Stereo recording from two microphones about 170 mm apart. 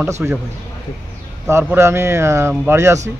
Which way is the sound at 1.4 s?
15° right (ahead or behind).